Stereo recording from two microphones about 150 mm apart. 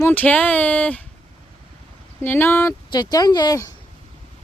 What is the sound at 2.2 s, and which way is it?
Speech, 15° left (ahead or behind).